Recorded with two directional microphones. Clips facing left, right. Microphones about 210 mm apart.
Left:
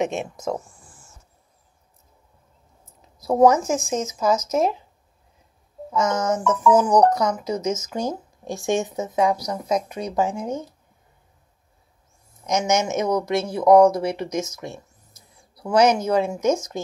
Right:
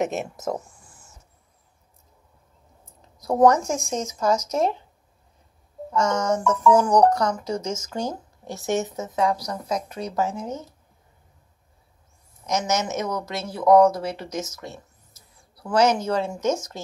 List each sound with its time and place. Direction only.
0.0 s speech: 5° right (ahead or behind)
3.0 s speech: 5° left (ahead or behind)
5.9 s speech: 5° left (ahead or behind)
12.4 s speech: 15° left (ahead or behind)